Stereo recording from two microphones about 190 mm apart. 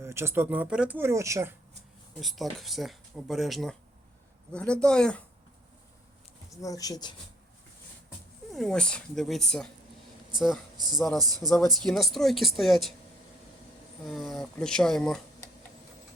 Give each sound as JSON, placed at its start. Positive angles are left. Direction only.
{"t": 0.0, "sound": "speech", "side_deg": -15}
{"t": 2.1, "sound": "speech", "side_deg": 0}
{"t": 6.5, "sound": "speech", "side_deg": 15}
{"t": 8.5, "sound": "speech", "side_deg": 5}
{"t": 10.9, "sound": "speech", "side_deg": 0}
{"t": 14.0, "sound": "speech", "side_deg": 0}